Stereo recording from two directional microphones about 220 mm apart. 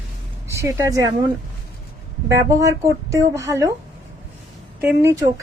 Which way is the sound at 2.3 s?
15° right (ahead or behind).